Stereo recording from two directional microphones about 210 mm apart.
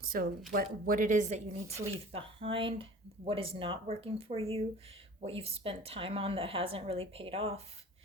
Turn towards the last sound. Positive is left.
turn(degrees=-30)  # may be behind; listen again after turning